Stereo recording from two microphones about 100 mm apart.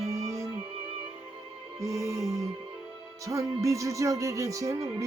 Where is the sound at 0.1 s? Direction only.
35° right (ahead or behind).